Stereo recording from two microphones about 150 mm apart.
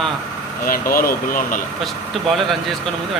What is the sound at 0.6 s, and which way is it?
Speech, 70° left (ahead or behind).